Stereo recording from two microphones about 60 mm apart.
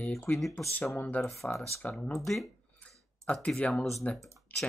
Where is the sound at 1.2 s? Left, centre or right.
Left.